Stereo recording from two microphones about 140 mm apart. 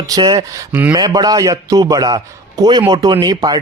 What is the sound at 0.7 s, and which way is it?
Speech, 10° right (ahead or behind).